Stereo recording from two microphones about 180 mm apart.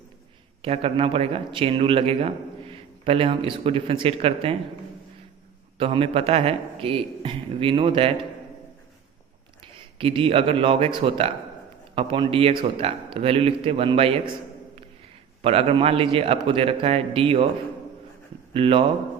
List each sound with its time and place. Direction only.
0.6 s a man's voice: 35° right (ahead or behind)
5.7 s a man's voice: 30° right (ahead or behind)
9.7 s a man's voice: 30° right (ahead or behind)
15.4 s a man's voice: 35° right (ahead or behind)
18.5 s speech: 30° right (ahead or behind)